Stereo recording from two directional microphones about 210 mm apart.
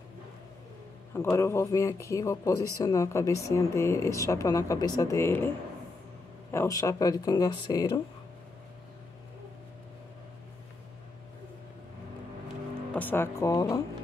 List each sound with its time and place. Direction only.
1.3 s a woman's voice: 15° left (ahead or behind)
6.5 s a woman's voice: 15° left (ahead or behind)
12.9 s speech: 10° left (ahead or behind)